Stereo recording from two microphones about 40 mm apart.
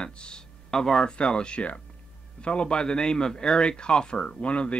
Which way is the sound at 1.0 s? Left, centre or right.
Left.